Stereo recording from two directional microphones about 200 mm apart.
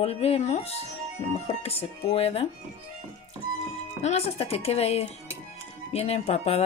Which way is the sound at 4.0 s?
30° left (ahead or behind).